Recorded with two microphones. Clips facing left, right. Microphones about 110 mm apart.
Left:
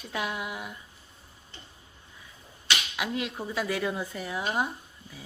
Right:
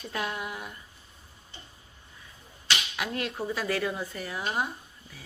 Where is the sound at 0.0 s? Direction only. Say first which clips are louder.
Even; 10° left (ahead or behind).